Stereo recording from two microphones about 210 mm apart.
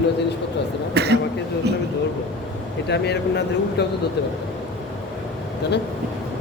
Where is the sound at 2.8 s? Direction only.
55° left (ahead or behind).